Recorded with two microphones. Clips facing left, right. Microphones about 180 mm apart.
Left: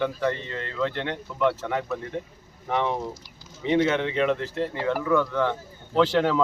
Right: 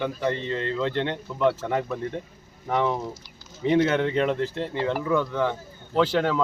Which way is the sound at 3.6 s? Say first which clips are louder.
Right 1 dB; 40° right (ahead or behind).